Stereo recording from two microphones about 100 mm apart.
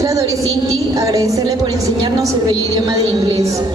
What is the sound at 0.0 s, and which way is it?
A woman's voice, 35° right (ahead or behind).